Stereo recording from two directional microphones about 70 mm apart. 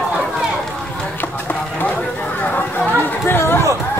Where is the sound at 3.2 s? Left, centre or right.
Left.